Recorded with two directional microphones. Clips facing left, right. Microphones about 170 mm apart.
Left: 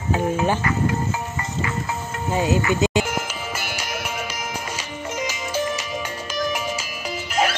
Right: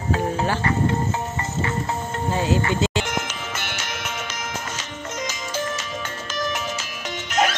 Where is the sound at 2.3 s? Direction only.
15° left (ahead or behind).